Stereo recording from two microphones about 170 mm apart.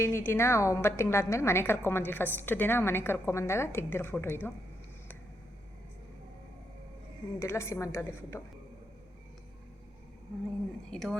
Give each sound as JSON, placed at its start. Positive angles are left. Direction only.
{"t": 0.0, "sound": "a woman's voice", "side_deg": 15}
{"t": 7.3, "sound": "a woman's voice", "side_deg": 15}
{"t": 10.9, "sound": "speech", "side_deg": 5}